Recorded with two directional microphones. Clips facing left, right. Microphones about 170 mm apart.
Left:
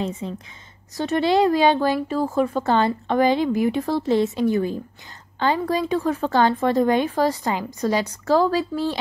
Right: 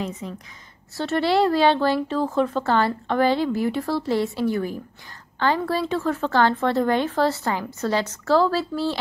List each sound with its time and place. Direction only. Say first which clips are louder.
0.0 s a woman's voice: left 3 dB; 30° left (ahead or behind)
0.9 s speech: left 2 dB; 15° left (ahead or behind)